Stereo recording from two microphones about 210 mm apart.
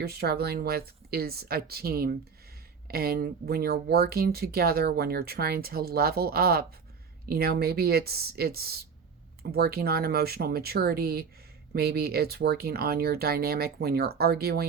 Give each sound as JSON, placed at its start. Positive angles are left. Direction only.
{"t": 0.0, "sound": "speech", "side_deg": -50}